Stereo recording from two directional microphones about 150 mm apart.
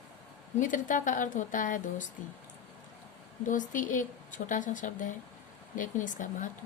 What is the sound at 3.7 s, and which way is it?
A woman's voice, 60° left (ahead or behind).